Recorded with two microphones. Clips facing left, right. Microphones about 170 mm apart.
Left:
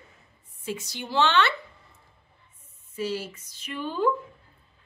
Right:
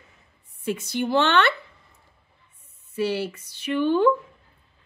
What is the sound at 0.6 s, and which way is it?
Speech, 60° right (ahead or behind).